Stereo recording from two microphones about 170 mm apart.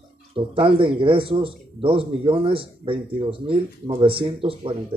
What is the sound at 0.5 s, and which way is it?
Speech, 30° right (ahead or behind).